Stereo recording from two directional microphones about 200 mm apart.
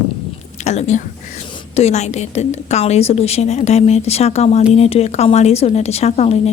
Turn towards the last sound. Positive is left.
turn(degrees=30)  # may be behind; listen again after turning